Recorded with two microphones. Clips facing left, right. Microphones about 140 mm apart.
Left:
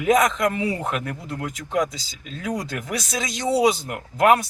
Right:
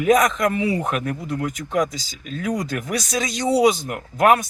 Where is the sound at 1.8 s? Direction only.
25° left (ahead or behind).